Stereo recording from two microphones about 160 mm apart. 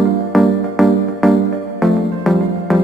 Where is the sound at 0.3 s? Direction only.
Centre (ahead or behind).